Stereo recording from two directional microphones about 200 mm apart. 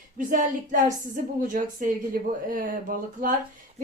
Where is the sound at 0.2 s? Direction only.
40° right (ahead or behind).